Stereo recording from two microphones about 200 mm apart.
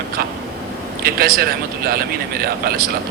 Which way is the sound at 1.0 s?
50° right (ahead or behind).